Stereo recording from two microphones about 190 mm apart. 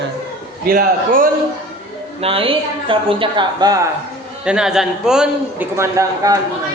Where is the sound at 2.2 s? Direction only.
30° right (ahead or behind).